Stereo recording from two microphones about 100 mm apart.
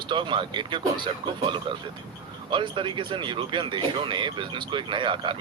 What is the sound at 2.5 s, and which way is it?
Speech, 55° right (ahead or behind).